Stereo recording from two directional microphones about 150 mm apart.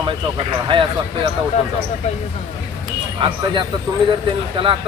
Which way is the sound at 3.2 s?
35° right (ahead or behind).